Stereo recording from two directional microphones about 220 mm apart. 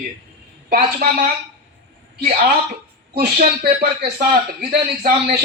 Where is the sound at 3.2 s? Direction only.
45° right (ahead or behind).